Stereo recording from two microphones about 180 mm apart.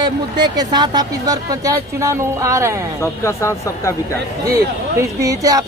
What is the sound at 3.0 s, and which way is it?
Speech, 15° left (ahead or behind).